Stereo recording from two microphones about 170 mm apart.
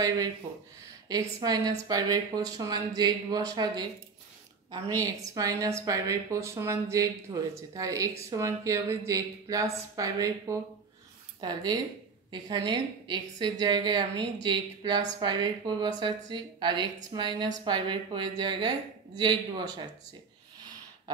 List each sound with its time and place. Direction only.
1.4 s a woman's voice: 20° right (ahead or behind)